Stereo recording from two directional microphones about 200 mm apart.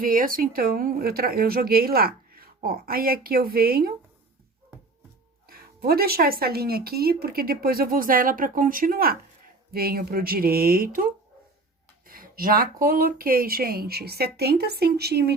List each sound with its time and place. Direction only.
0.0 s speech: 45° right (ahead or behind)
5.5 s speech: 50° right (ahead or behind)